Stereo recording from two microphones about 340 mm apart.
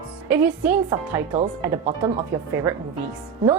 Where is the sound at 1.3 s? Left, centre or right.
Centre.